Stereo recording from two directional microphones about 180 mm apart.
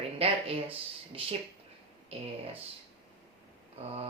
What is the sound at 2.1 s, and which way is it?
Speech, 30° right (ahead or behind).